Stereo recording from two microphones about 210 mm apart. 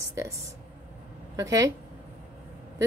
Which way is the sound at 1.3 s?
15° right (ahead or behind).